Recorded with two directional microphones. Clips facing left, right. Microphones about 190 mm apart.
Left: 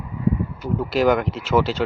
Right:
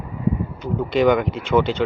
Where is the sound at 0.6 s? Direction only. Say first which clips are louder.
Right 2 dB; 5° left (ahead or behind).